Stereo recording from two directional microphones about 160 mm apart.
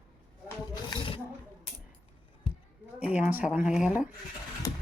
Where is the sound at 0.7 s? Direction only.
30° left (ahead or behind).